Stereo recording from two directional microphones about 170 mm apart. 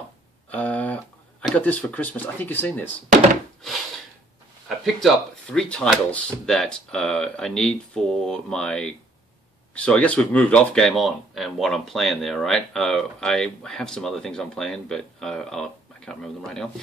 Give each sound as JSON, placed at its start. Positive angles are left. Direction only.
{"t": 0.5, "sound": "a sound", "side_deg": 10}
{"t": 1.4, "sound": "speech", "side_deg": 10}
{"t": 4.6, "sound": "speech", "side_deg": 0}